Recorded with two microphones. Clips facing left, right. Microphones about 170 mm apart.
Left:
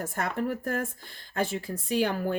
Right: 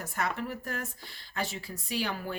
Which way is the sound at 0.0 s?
50° left (ahead or behind).